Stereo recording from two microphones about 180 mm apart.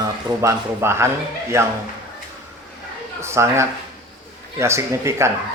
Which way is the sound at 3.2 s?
15° right (ahead or behind).